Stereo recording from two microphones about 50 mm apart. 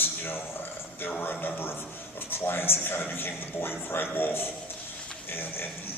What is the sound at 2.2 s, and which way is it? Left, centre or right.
A man's voice, left.